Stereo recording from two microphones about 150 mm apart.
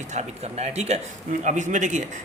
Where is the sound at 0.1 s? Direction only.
50° right (ahead or behind).